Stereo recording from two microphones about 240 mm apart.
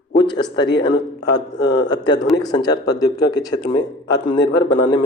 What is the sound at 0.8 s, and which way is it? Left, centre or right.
A man's voice, centre.